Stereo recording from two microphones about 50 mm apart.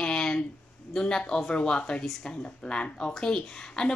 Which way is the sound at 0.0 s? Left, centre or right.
Centre.